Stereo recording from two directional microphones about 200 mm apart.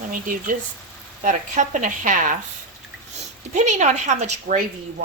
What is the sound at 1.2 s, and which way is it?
Speech, 40° right (ahead or behind).